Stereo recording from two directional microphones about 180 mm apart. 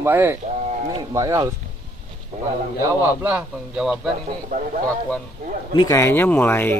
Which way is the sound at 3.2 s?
10° right (ahead or behind).